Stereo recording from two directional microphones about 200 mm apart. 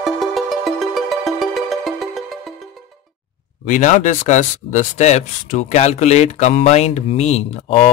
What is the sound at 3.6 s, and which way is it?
Speech, 40° left (ahead or behind).